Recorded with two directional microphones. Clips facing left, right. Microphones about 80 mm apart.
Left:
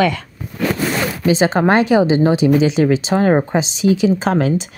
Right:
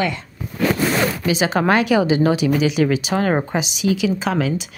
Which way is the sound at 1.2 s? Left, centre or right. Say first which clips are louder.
Left 4 dB; left.